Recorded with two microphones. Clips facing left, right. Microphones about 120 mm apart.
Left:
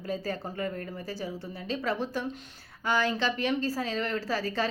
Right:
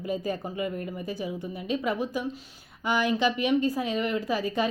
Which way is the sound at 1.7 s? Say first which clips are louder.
Right 2 dB; 15° right (ahead or behind).